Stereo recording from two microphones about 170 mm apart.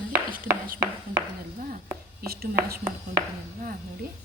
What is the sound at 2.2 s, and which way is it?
Whispering, 60° right (ahead or behind).